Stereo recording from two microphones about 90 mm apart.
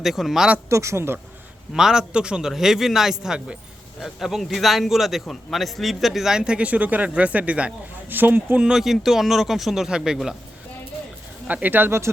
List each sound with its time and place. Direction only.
0.0 s a man's voice: centre (ahead or behind)
0.7 s speech: 35° right (ahead or behind)
1.7 s a man's voice: 5° right (ahead or behind)
11.4 s speech: 20° right (ahead or behind)